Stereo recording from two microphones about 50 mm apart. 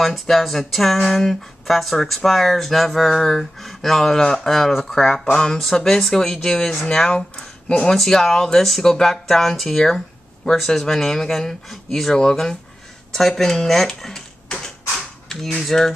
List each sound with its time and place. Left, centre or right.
0.0 s speech: centre
7.9 s speech: centre
15.2 s speech: centre